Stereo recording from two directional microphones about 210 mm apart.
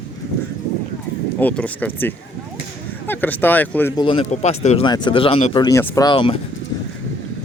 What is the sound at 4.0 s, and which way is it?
Speech, 25° left (ahead or behind).